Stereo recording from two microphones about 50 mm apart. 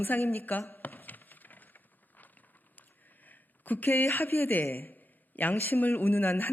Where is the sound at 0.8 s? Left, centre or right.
Left.